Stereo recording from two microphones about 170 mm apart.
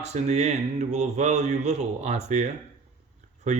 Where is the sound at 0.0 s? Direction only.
40° right (ahead or behind).